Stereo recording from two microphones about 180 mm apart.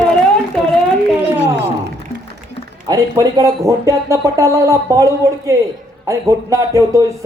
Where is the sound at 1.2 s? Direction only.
75° right (ahead or behind).